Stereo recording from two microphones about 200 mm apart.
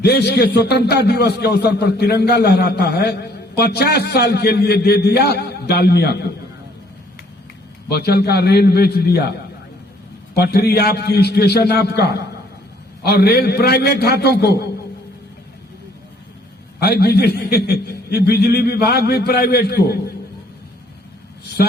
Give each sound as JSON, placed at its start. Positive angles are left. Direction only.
{"t": 0.0, "sound": "a man's voice", "side_deg": 55}
{"t": 7.9, "sound": "a man's voice", "side_deg": 55}
{"t": 10.3, "sound": "a man's voice", "side_deg": 55}
{"t": 16.8, "sound": "a man's voice", "side_deg": 55}